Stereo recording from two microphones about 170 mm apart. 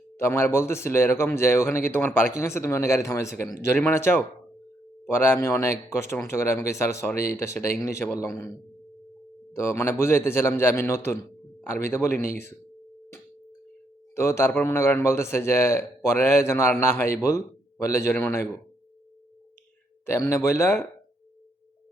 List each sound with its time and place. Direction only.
0.2 s speech: 15° left (ahead or behind)
9.5 s speech: 15° left (ahead or behind)
14.2 s speech: 15° left (ahead or behind)
20.1 s speech: 15° left (ahead or behind)